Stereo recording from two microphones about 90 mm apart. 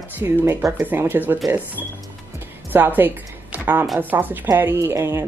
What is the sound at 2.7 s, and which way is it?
A woman's voice, 20° right (ahead or behind).